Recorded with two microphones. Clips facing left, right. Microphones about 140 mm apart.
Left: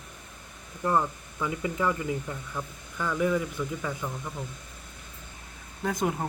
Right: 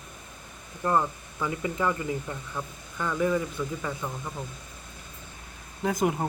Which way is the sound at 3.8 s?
5° right (ahead or behind).